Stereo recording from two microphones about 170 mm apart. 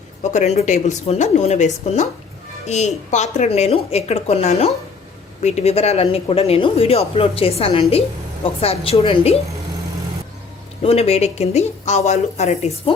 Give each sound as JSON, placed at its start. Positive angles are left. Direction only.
{"t": 0.2, "sound": "speech", "side_deg": 40}
{"t": 10.8, "sound": "speech", "side_deg": 35}